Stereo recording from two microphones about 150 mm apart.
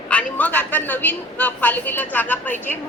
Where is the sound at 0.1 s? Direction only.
10° left (ahead or behind).